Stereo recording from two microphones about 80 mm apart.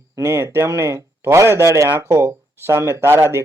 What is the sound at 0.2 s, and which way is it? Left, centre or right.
Speech, right.